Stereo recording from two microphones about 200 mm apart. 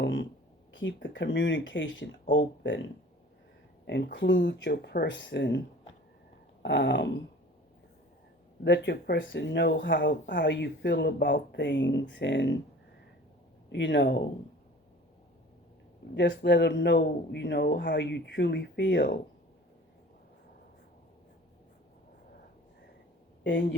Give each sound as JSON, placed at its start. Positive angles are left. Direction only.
{"t": 0.0, "sound": "speech", "side_deg": 65}
{"t": 3.8, "sound": "speech", "side_deg": 55}
{"t": 8.6, "sound": "speech", "side_deg": 60}
{"t": 13.7, "sound": "speech", "side_deg": 65}
{"t": 16.1, "sound": "speech", "side_deg": 60}
{"t": 23.4, "sound": "speech", "side_deg": 65}